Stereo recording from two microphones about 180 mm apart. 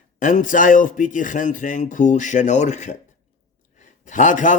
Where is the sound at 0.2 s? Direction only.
45° left (ahead or behind).